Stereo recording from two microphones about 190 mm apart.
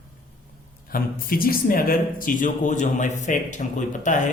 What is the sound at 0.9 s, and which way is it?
Speech, 50° left (ahead or behind).